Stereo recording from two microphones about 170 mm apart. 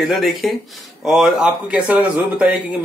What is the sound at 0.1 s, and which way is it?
Speech, centre (ahead or behind).